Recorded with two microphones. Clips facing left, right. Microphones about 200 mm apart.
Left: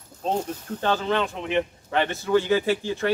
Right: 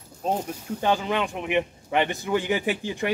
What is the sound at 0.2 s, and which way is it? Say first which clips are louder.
Speech: left 1 dB; 10° right (ahead or behind).